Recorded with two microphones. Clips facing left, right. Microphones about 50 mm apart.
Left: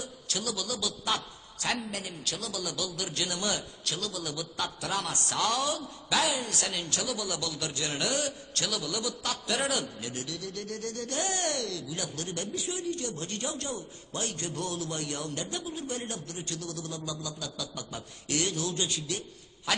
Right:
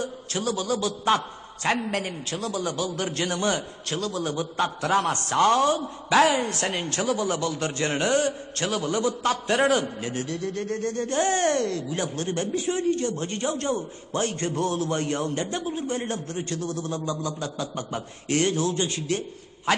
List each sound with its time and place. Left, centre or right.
0.0 s a man's voice: right
2.2 s a man's voice: right